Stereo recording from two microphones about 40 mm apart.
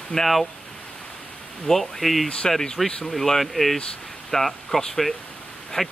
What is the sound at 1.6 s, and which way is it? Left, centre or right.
Speech, centre.